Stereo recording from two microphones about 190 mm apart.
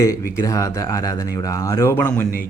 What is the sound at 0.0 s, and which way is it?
A man's voice, 15° left (ahead or behind).